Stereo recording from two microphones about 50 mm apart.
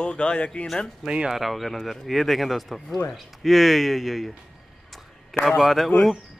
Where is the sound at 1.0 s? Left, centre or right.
Centre.